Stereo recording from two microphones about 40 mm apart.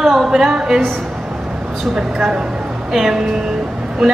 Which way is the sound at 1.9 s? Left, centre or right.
Centre.